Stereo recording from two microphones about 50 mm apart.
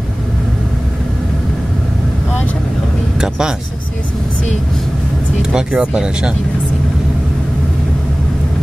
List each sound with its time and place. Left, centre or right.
3.2 s vehicle: centre
5.4 s speech: centre